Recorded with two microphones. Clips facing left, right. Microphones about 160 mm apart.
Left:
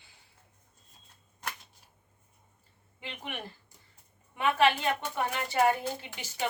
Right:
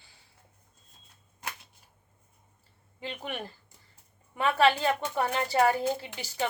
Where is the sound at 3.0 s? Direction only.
35° right (ahead or behind).